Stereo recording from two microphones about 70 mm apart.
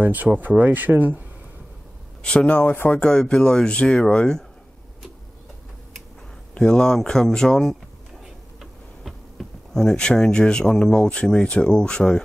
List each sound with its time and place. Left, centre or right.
0.0 s speech: right
2.2 s speech: centre
2.9 s speech: centre
6.5 s speech: centre
8.5 s tick-tock: centre
11.2 s speech: centre